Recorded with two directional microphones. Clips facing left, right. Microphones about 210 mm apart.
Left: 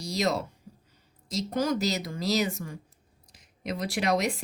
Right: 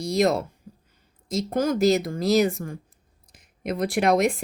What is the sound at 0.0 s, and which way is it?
Speech, 55° right (ahead or behind).